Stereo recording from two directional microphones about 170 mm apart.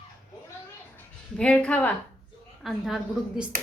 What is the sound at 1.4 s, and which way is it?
A woman's voice, 5° left (ahead or behind).